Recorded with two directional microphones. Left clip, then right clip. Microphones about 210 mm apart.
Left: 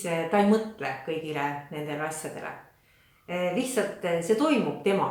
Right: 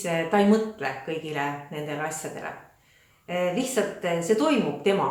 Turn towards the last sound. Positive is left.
turn(degrees=0)  # may be behind; listen again after turning